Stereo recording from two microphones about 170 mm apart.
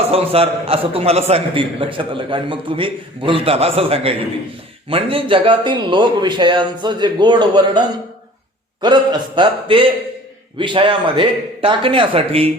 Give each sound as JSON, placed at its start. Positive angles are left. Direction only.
{"t": 0.1, "sound": "a man's voice", "side_deg": -35}